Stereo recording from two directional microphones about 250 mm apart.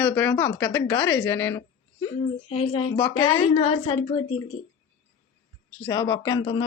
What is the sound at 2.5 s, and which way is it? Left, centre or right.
Speech, left.